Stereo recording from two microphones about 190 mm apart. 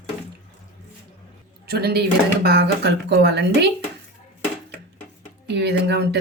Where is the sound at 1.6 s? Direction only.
55° right (ahead or behind).